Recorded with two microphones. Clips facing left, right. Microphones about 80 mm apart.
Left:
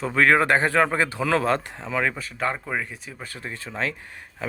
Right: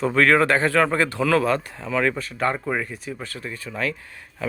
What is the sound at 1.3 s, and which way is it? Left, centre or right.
Speech, left.